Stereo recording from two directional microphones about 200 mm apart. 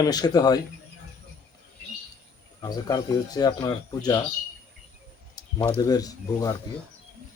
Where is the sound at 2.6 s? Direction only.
20° left (ahead or behind).